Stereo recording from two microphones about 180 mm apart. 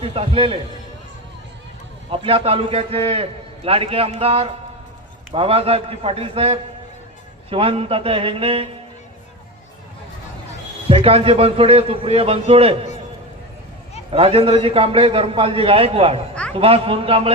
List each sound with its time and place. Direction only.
0.0 s a man's voice: 30° right (ahead or behind)
2.0 s a man's voice: 30° right (ahead or behind)
10.8 s a man's voice: 30° right (ahead or behind)
14.1 s a man's voice: 35° right (ahead or behind)
16.3 s a sound: 5° left (ahead or behind)
16.6 s a man's voice: 30° right (ahead or behind)